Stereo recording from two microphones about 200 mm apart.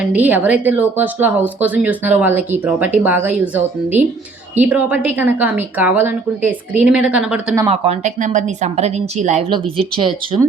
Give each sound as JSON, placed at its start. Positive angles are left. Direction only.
{"t": 0.0, "sound": "speech", "side_deg": -10}
{"t": 7.7, "sound": "a woman's voice", "side_deg": -35}
{"t": 9.5, "sound": "speech", "side_deg": -25}